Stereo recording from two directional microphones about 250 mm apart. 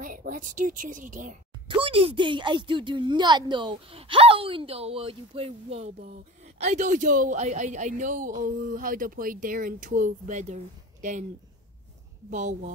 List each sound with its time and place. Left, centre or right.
0.0 s a woman's voice: right
12.3 s a woman's voice: right